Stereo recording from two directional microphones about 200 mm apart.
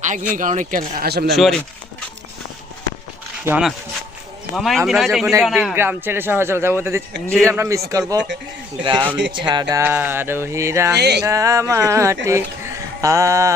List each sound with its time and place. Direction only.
0.0 s speech: 40° right (ahead or behind)
1.4 s a man's voice: centre (ahead or behind)
3.4 s a man's voice: 5° right (ahead or behind)
10.9 s speech: 55° right (ahead or behind)
11.3 s speech: 15° right (ahead or behind)